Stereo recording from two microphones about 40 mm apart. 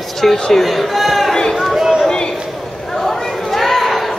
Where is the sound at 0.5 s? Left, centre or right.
Centre.